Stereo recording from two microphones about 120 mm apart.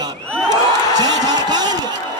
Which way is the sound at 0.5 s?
35° right (ahead or behind).